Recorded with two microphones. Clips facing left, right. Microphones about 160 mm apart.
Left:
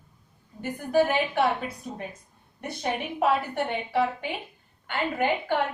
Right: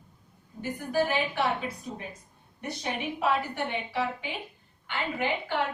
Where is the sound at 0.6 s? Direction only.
55° left (ahead or behind).